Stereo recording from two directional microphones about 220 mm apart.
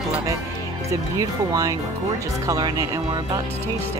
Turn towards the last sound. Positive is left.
turn(degrees=-15)  # may be behind; listen again after turning